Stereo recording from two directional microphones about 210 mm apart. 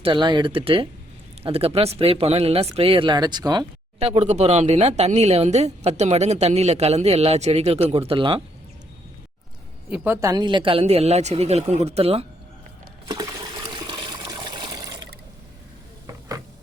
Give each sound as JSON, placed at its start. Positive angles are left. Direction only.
{"t": 0.0, "sound": "speech", "side_deg": -20}
{"t": 9.9, "sound": "speech", "side_deg": -10}
{"t": 13.1, "sound": "water", "side_deg": -20}